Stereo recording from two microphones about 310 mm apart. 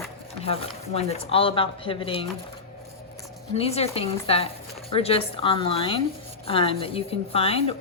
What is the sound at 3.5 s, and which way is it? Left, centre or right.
A woman's voice, centre.